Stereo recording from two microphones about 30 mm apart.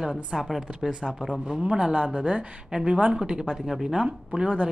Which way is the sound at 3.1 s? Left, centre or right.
Right.